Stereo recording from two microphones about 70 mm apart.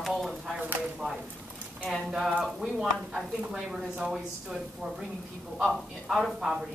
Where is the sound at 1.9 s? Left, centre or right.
Centre.